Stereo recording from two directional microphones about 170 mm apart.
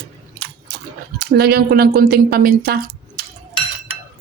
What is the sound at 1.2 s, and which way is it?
Speech, 70° right (ahead or behind).